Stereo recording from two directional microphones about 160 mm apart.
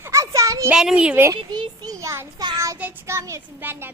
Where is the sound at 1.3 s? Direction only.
25° right (ahead or behind).